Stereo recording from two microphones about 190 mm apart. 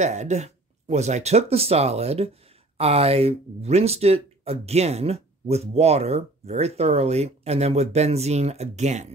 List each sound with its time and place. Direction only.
0.0 s speech: 35° right (ahead or behind)